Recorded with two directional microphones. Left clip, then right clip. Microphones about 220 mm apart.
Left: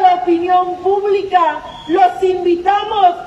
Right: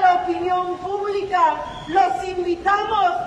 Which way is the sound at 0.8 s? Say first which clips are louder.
Left 9 dB; 40° left (ahead or behind).